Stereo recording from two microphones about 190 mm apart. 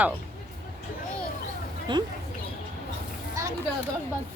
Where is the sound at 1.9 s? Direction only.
25° right (ahead or behind).